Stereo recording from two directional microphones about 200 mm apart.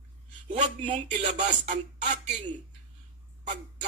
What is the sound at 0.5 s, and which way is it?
A man's voice, 35° right (ahead or behind).